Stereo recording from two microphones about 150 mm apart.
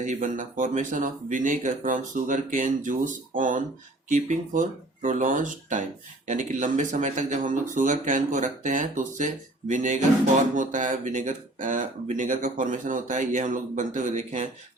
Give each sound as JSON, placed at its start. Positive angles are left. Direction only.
{"t": 0.0, "sound": "speech", "side_deg": -55}